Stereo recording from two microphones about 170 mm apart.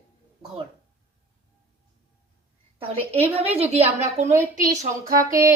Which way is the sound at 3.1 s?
40° right (ahead or behind).